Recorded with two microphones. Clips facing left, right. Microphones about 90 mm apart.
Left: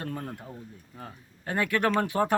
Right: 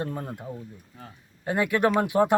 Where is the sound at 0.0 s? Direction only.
25° right (ahead or behind).